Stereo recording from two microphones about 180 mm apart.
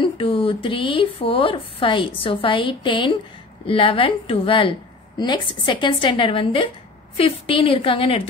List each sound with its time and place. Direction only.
0.0 s speech: 30° left (ahead or behind)